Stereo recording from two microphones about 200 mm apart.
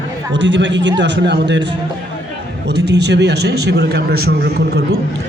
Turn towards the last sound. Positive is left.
turn(degrees=-55)  # may be behind; listen again after turning